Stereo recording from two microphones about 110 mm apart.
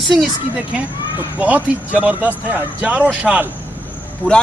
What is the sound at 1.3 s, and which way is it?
Speech, 15° right (ahead or behind).